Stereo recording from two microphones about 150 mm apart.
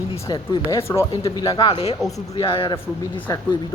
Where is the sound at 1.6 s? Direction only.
40° left (ahead or behind).